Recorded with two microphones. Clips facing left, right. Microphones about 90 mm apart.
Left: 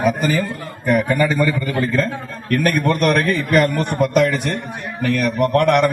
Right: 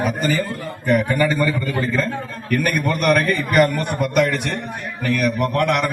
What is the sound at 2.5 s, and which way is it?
A man's voice, 5° right (ahead or behind).